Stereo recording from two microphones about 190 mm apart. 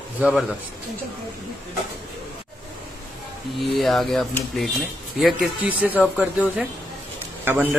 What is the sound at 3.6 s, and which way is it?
A man's voice, centre (ahead or behind).